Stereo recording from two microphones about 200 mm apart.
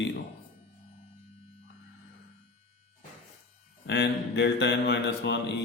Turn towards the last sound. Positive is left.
turn(degrees=60)  # may be behind; listen again after turning